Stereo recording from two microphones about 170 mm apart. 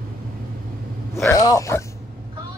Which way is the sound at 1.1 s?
20° left (ahead or behind).